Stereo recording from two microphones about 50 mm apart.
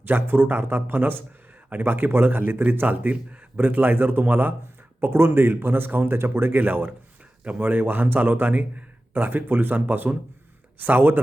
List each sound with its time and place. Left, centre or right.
0.1 s a man's voice: right